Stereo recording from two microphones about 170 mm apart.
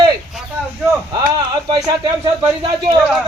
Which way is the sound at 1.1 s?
25° right (ahead or behind).